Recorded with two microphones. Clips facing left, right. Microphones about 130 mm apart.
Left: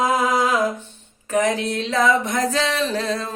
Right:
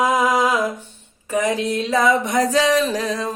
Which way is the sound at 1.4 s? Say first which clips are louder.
Right 3 dB; 15° right (ahead or behind).